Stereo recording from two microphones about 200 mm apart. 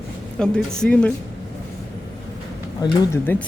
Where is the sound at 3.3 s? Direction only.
10° left (ahead or behind).